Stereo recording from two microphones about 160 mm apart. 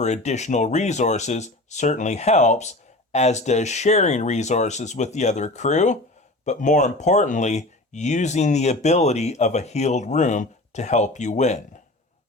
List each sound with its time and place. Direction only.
0.0 s speech: 45° left (ahead or behind)